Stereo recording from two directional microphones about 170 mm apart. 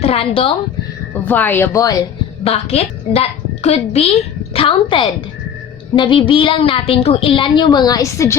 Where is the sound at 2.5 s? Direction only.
40° left (ahead or behind).